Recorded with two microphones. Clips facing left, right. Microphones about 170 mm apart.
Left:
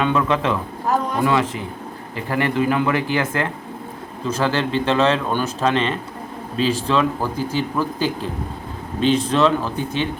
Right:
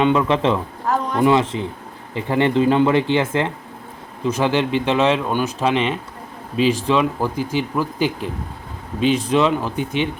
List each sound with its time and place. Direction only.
0.0 s speech: 20° right (ahead or behind)